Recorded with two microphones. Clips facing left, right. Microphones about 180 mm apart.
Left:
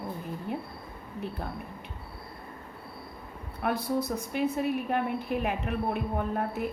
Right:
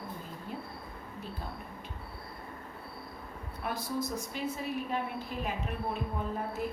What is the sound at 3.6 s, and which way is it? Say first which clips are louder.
A woman's voice: left 6 dB; 60° left (ahead or behind).